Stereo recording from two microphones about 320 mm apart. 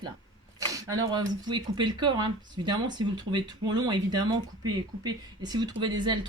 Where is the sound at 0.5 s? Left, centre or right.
Centre.